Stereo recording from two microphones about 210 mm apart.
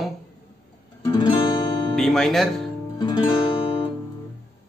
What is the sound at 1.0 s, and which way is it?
Music, 20° left (ahead or behind).